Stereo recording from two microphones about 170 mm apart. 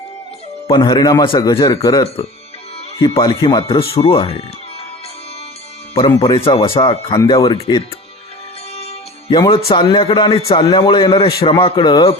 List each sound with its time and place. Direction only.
0.7 s a man's voice: 25° left (ahead or behind)
6.1 s speech: 30° left (ahead or behind)
8.7 s music: 35° left (ahead or behind)
9.6 s a man's voice: 30° left (ahead or behind)